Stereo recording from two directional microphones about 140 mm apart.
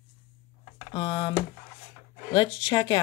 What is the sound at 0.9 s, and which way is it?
Speech, 30° left (ahead or behind).